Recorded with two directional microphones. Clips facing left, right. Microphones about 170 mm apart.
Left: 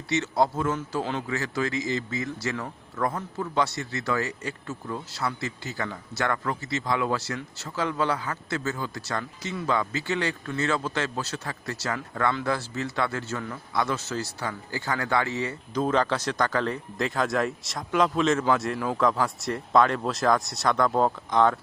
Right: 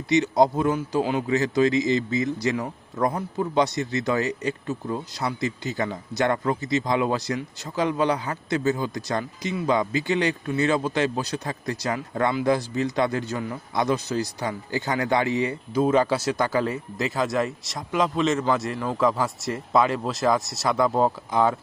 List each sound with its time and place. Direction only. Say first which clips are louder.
0.1 s speech: right 5 dB; 15° right (ahead or behind)